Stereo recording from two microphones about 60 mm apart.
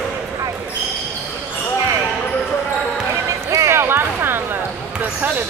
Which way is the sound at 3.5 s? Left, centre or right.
Right.